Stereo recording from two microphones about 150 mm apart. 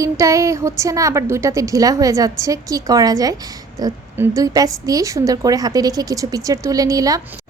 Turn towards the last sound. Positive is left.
turn(degrees=-25)  # may be behind; listen again after turning